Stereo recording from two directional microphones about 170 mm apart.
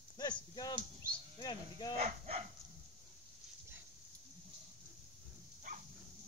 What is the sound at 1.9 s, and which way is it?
Dog, 40° right (ahead or behind).